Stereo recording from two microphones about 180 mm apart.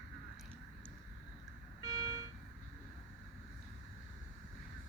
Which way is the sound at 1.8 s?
20° right (ahead or behind).